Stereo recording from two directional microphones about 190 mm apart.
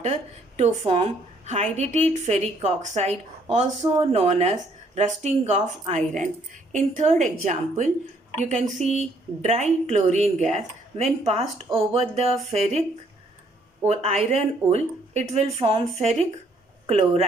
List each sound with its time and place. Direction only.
0.0 s speech: 35° right (ahead or behind)
4.1 s speech: 35° right (ahead or behind)
13.8 s speech: 35° right (ahead or behind)